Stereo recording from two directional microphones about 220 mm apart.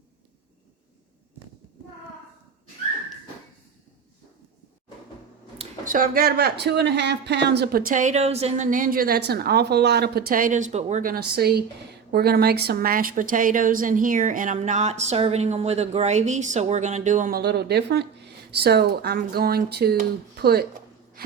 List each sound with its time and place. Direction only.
5.5 s a woman's voice: 35° right (ahead or behind)